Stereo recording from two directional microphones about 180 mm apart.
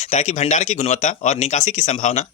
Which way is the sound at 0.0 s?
40° left (ahead or behind).